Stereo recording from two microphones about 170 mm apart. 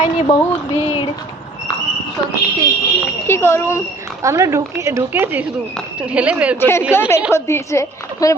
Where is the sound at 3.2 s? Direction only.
15° left (ahead or behind).